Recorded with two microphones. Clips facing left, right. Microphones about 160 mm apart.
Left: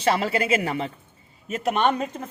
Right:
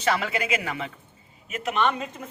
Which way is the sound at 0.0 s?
35° left (ahead or behind).